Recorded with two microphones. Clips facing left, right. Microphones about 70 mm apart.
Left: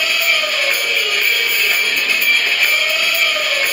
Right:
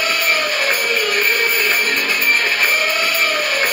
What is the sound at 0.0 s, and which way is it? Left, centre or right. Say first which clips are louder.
Music: even; right.